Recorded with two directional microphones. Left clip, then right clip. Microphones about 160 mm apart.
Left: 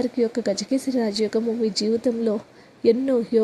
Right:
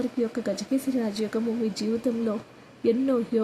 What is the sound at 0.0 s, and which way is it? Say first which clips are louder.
Speech: left 5 dB; 20° left (ahead or behind).